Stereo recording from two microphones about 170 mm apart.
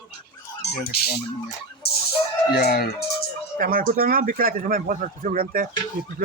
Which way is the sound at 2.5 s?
65° left (ahead or behind).